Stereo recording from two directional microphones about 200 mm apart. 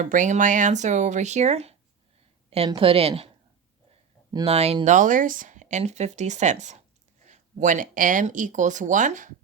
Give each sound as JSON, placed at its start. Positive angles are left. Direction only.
{"t": 0.0, "sound": "a woman's voice", "side_deg": -40}
{"t": 4.4, "sound": "speech", "side_deg": -30}